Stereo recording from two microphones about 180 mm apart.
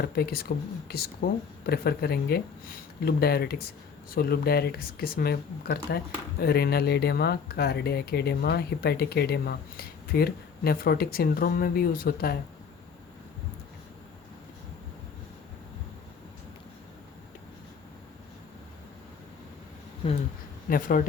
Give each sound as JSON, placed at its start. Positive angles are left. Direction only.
{"t": 0.2, "sound": "speech", "side_deg": 60}
{"t": 20.7, "sound": "speech", "side_deg": 50}